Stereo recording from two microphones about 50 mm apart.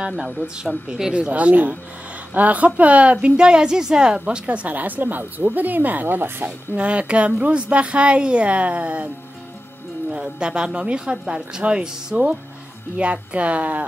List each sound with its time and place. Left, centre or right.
0.7 s speech: centre
1.3 s a woman's voice: right
6.7 s a woman's voice: right
10.1 s a woman's voice: centre